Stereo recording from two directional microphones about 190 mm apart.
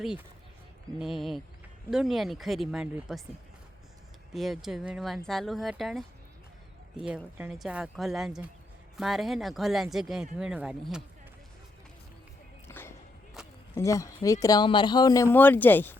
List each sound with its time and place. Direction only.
0.0 s speech: 5° right (ahead or behind)
4.4 s speech: centre (ahead or behind)
12.6 s music: 10° left (ahead or behind)
13.7 s speech: 15° left (ahead or behind)